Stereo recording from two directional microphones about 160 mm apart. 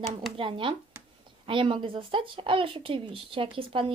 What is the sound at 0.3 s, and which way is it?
Speech, 35° right (ahead or behind).